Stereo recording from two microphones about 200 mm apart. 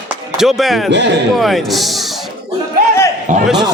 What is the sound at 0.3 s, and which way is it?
Speech, centre (ahead or behind).